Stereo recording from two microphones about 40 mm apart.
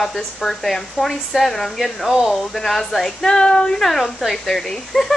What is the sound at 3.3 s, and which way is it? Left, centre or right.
Speech, centre.